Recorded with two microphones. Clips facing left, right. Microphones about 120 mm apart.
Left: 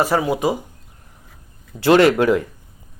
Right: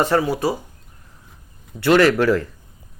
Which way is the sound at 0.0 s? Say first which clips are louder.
Even; 15° left (ahead or behind).